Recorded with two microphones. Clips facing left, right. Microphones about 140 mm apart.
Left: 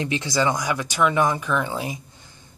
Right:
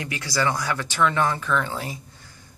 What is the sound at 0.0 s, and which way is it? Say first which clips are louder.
Speech: left 3 dB; 20° left (ahead or behind).